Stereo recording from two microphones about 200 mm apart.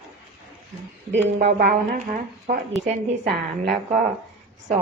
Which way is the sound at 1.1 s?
60° right (ahead or behind).